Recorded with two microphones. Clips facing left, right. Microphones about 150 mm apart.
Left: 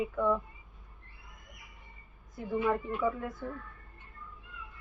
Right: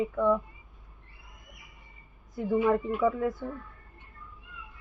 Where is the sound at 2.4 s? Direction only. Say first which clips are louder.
Right 5 dB; 25° right (ahead or behind).